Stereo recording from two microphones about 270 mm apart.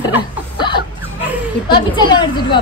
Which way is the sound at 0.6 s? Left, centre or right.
Centre.